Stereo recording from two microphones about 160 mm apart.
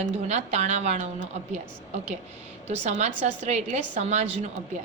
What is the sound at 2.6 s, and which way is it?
A woman's voice, 45° right (ahead or behind).